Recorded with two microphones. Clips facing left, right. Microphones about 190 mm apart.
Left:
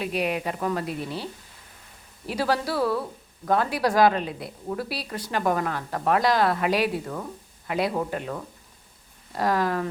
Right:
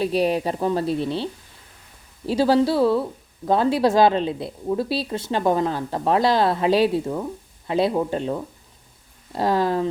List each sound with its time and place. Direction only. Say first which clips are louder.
0.0 s a woman's voice: right 6 dB; 30° right (ahead or behind)